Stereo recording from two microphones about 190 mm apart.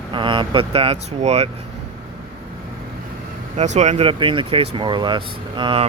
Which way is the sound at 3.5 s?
35° right (ahead or behind).